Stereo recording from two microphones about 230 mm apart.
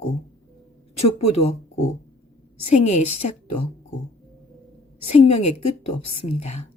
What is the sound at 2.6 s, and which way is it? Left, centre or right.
Speech, left.